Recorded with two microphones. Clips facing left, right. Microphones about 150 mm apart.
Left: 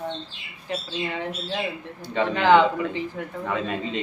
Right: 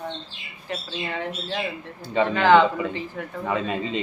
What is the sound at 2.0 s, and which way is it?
Speech, centre (ahead or behind).